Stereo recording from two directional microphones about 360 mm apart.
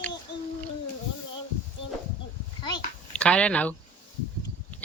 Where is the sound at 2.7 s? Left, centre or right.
Centre.